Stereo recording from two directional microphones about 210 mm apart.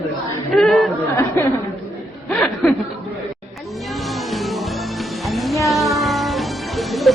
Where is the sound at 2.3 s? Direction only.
5° left (ahead or behind).